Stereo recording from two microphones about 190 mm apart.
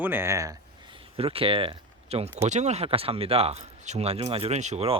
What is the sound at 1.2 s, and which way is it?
Speech, 30° right (ahead or behind).